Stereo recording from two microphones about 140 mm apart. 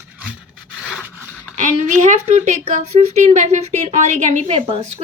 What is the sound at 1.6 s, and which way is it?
Speech, 65° right (ahead or behind).